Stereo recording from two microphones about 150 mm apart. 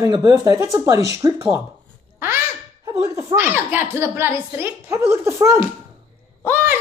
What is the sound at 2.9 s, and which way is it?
A woman's voice, 20° right (ahead or behind).